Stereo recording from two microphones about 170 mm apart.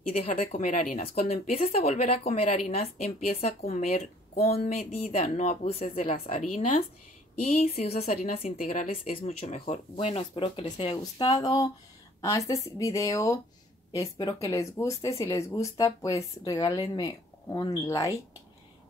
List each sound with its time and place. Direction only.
0.3 s speech: 45° left (ahead or behind)
11.4 s speech: 25° left (ahead or behind)